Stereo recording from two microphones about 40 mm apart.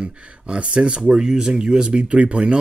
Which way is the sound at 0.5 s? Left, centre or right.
Right.